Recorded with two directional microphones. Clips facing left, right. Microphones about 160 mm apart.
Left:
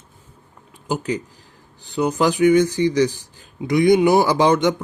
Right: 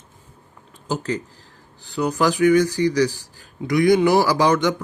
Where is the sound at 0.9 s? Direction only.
15° left (ahead or behind).